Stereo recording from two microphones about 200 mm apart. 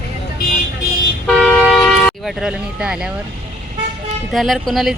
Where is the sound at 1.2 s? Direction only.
5° left (ahead or behind).